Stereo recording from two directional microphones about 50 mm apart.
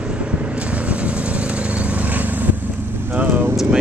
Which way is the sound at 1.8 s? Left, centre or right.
Right.